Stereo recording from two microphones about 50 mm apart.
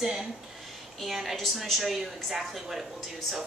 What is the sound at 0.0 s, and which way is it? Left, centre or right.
A woman's voice, centre.